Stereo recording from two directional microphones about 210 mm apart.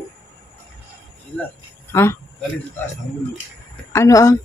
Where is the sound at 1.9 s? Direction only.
10° left (ahead or behind).